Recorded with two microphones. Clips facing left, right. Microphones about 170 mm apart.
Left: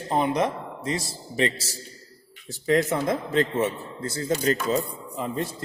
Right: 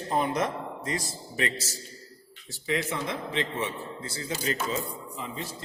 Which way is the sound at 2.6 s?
45° left (ahead or behind).